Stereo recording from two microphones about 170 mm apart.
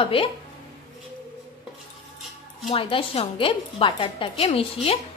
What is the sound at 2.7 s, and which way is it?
A woman's voice, 30° left (ahead or behind).